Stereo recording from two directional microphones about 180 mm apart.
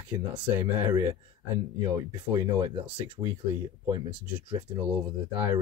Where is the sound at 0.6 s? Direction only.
15° right (ahead or behind).